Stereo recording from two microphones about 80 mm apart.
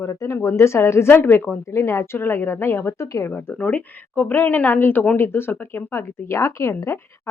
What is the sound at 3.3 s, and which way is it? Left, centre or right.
Speech, left.